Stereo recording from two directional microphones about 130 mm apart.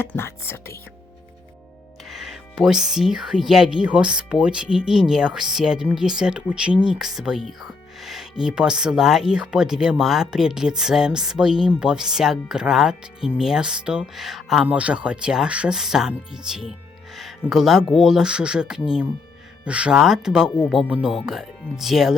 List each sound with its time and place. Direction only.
0.0 s speech: 20° left (ahead or behind)
2.0 s speech: centre (ahead or behind)